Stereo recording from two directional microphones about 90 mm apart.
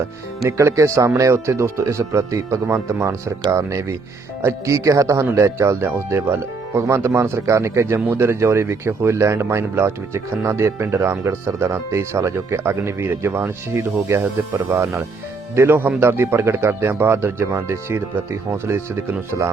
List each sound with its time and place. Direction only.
0.4 s speech: 35° right (ahead or behind)